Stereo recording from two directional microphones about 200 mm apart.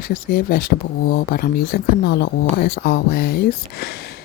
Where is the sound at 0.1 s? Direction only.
50° left (ahead or behind).